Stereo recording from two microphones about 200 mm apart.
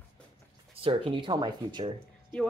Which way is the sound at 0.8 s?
25° right (ahead or behind).